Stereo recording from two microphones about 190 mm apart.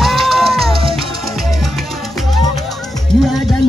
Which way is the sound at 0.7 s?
30° right (ahead or behind).